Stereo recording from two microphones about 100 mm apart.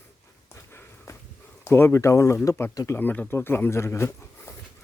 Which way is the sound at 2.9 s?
20° left (ahead or behind).